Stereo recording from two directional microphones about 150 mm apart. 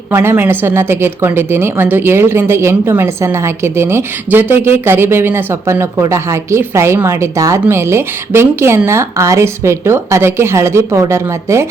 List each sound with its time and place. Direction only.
0.1 s a woman's voice: 15° right (ahead or behind)